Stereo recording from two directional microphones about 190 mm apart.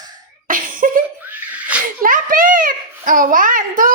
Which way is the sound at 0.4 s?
45° right (ahead or behind).